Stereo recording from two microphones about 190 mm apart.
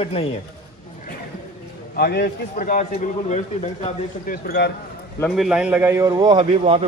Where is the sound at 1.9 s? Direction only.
55° left (ahead or behind); by 4.4 s 35° left (ahead or behind).